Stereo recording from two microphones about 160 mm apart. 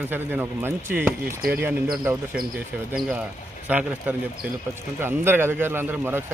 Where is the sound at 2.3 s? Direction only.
65° right (ahead or behind).